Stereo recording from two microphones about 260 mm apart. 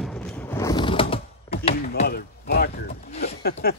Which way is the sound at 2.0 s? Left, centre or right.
Left.